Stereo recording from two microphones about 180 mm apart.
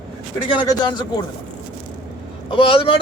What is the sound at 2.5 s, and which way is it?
Speech, 30° left (ahead or behind).